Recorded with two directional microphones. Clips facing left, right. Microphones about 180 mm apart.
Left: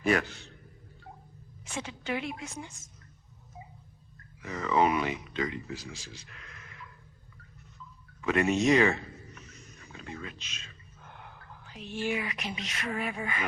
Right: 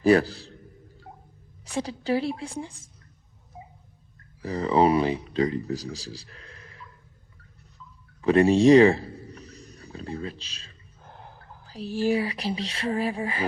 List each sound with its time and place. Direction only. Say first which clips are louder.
0.0 s a woman's voice: right 8 dB; 35° right (ahead or behind)
1.7 s a woman's voice: right 8 dB; 35° right (ahead or behind)
4.4 s speech: right 5 dB; 35° right (ahead or behind)
8.2 s speech: right 8 dB; 30° right (ahead or behind)